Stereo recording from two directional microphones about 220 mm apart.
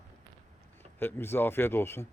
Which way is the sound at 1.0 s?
10° left (ahead or behind).